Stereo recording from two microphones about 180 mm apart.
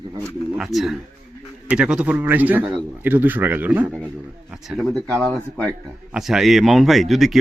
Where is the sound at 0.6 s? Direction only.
Centre (ahead or behind).